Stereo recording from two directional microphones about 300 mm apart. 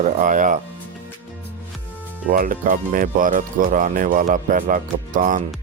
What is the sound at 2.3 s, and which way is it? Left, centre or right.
Speech, right.